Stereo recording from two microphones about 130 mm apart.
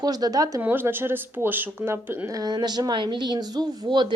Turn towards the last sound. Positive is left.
turn(degrees=-35)  # may be behind; listen again after turning